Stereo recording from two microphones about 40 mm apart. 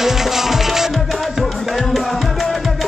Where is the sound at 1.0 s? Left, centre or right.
Centre.